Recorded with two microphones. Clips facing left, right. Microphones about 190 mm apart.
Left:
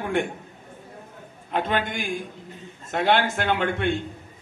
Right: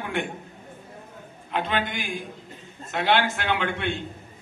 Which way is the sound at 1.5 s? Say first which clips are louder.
Left 2 dB; 45° left (ahead or behind).